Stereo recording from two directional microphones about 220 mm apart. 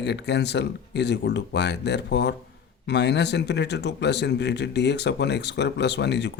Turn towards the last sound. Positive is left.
turn(degrees=50)  # may be behind; listen again after turning